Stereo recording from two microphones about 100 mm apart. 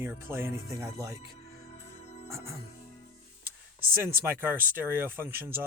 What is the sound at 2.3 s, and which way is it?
Speech, 25° right (ahead or behind).